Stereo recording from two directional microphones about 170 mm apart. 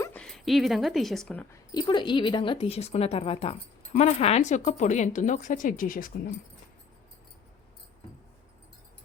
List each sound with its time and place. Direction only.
0.0 s speech: 10° left (ahead or behind)
1.7 s speech: 25° left (ahead or behind); by 6.1 s 55° left (ahead or behind)